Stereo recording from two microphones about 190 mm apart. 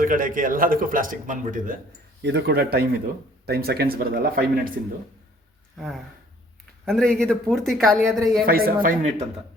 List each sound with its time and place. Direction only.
0.0 s a man's voice: 45° right (ahead or behind)
2.2 s a man's voice: 60° right (ahead or behind)
5.7 s speech: centre (ahead or behind)
8.4 s a man's voice: 50° right (ahead or behind)